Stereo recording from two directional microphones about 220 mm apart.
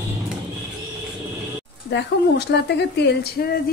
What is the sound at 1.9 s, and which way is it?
Speech, 50° left (ahead or behind).